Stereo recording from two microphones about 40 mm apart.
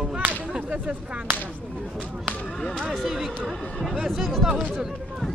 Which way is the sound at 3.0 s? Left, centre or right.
Centre.